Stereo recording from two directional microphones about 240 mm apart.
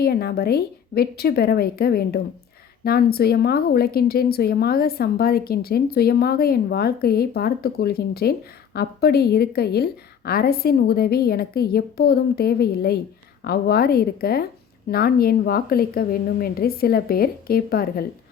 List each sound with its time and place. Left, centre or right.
0.0 s a woman's voice: left